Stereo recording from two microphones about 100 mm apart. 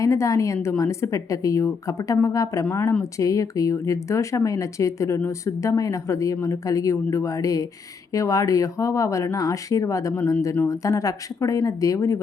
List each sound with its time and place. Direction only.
0.0 s speech: 30° left (ahead or behind)